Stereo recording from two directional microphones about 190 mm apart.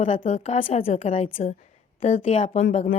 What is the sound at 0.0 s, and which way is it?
A woman's voice, 40° left (ahead or behind).